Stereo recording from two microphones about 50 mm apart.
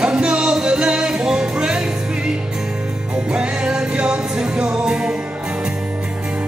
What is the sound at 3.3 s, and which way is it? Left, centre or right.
Music, centre.